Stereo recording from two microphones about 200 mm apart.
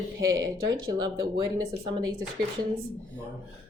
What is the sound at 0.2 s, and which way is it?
A woman's voice, 15° right (ahead or behind).